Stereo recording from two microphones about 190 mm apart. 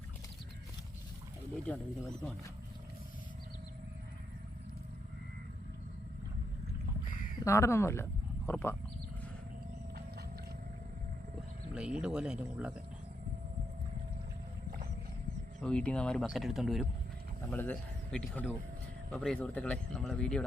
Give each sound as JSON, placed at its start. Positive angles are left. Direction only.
{"t": 1.6, "sound": "speech", "side_deg": 5}
{"t": 7.4, "sound": "speech", "side_deg": 15}
{"t": 11.7, "sound": "speech", "side_deg": -5}
{"t": 15.6, "sound": "speech", "side_deg": 5}